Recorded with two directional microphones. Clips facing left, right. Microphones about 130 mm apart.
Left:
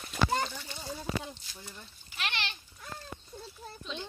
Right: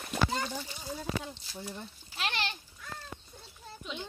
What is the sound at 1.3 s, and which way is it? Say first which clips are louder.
Speech: right 4 dB; 25° right (ahead or behind).